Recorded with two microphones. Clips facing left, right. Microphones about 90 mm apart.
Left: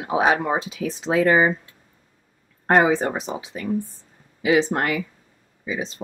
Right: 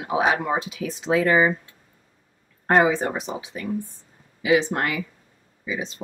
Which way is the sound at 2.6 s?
30° left (ahead or behind).